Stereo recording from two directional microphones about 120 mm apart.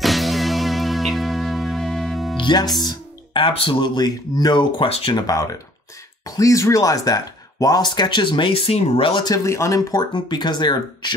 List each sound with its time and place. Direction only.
0.0 s music: centre (ahead or behind)
2.3 s speech: 40° left (ahead or behind)
4.8 s speech: 55° left (ahead or behind)
5.1 s speech: 30° left (ahead or behind); by 9.1 s 55° left (ahead or behind)
9.1 s speech: 30° left (ahead or behind)